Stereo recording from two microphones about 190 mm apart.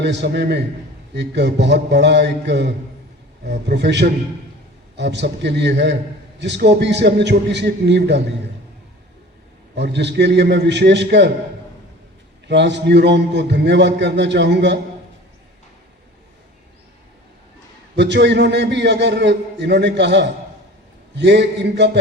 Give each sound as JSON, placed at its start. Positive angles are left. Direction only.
{"t": 0.0, "sound": "a man's voice", "side_deg": -65}
{"t": 9.7, "sound": "a man's voice", "side_deg": -65}
{"t": 12.5, "sound": "a man's voice", "side_deg": -65}
{"t": 17.9, "sound": "a man's voice", "side_deg": -65}